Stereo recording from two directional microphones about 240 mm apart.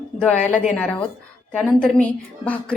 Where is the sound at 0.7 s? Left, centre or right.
Centre.